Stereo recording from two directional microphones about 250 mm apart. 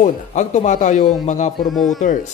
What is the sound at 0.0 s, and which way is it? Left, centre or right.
Speech, left.